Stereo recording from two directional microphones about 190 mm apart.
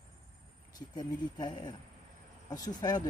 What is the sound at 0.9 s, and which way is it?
Speech, 25° left (ahead or behind).